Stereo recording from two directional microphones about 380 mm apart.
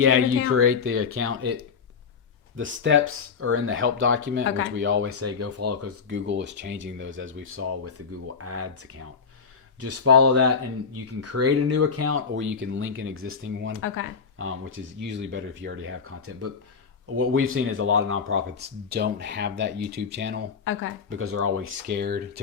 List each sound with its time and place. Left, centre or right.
0.0 s speech: right
2.6 s speech: right
13.7 s speech: left
14.3 s speech: right